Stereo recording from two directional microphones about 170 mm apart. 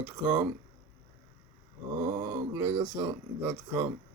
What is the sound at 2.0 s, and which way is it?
Speech, 25° right (ahead or behind).